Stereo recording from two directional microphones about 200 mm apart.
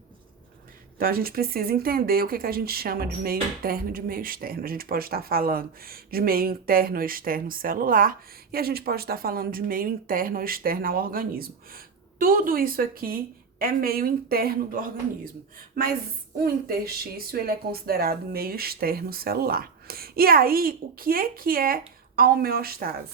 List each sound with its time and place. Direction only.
0.9 s speech: 45° right (ahead or behind)
16.4 s speech: 50° right (ahead or behind)